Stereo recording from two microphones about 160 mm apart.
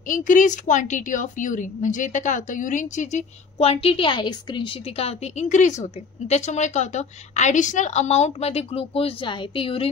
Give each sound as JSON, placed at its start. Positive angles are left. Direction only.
{"t": 0.1, "sound": "a woman's voice", "side_deg": 50}